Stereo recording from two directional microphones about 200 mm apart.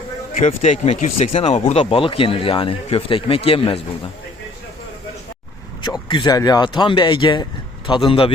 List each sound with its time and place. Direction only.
0.3 s speech: 35° left (ahead or behind)
5.8 s speech: 25° left (ahead or behind)